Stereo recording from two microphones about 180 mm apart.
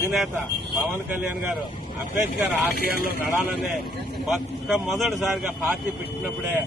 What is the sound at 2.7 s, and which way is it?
Speech, 55° left (ahead or behind).